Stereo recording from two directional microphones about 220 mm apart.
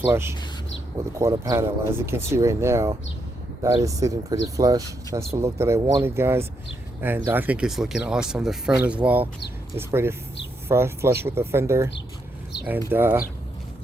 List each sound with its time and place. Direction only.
0.1 s speech: 10° right (ahead or behind)
12.5 s a sound: 50° left (ahead or behind)
12.9 s speech: 10° right (ahead or behind)